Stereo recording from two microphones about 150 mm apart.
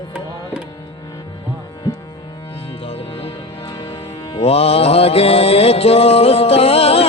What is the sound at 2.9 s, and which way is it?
Music, 40° left (ahead or behind).